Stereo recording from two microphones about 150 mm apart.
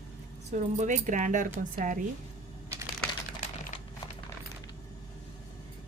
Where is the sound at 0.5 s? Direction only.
55° right (ahead or behind).